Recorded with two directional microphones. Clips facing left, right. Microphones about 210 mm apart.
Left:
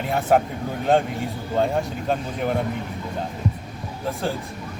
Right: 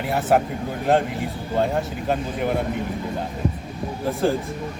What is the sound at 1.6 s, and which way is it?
Speech, centre (ahead or behind).